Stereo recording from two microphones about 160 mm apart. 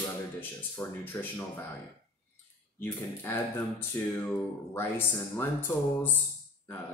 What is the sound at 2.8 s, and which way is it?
Speech, 15° left (ahead or behind).